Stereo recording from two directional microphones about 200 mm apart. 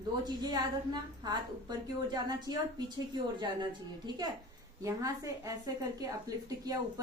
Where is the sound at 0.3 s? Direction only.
20° right (ahead or behind).